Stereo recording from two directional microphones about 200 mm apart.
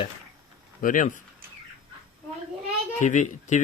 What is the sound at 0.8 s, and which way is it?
Speech, 40° left (ahead or behind).